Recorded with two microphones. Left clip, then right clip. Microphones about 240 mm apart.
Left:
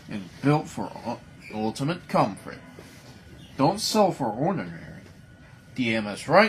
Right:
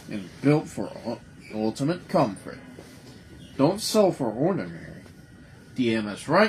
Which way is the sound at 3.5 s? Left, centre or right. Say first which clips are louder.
Even; left.